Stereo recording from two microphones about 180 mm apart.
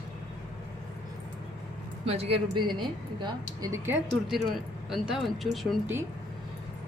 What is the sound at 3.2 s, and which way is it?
Speech, 20° right (ahead or behind).